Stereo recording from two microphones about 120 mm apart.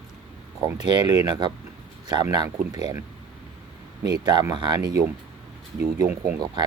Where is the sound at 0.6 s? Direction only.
35° right (ahead or behind).